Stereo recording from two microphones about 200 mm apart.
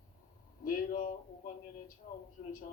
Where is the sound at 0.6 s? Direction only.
45° left (ahead or behind).